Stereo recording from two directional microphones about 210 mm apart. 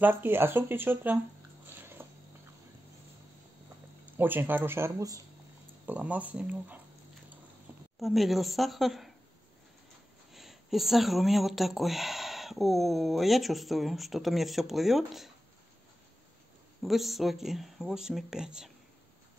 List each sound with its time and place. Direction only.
0.0 s speech: 10° right (ahead or behind)
1.7 s biting: 10° right (ahead or behind)
4.0 s speech: 10° right (ahead or behind)
8.0 s speech: centre (ahead or behind)
10.3 s speech: centre (ahead or behind)
16.8 s speech: centre (ahead or behind)